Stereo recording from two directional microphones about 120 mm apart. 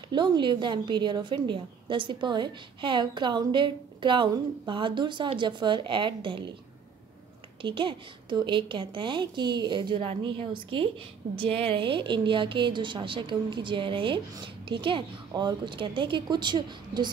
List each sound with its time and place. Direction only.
0.1 s a woman's voice: 40° right (ahead or behind)
7.6 s a woman's voice: 40° right (ahead or behind)